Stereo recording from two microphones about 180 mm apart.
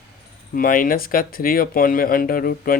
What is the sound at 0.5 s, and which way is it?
Speech, 50° left (ahead or behind).